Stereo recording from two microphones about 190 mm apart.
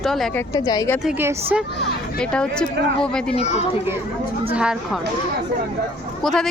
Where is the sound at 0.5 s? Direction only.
20° left (ahead or behind).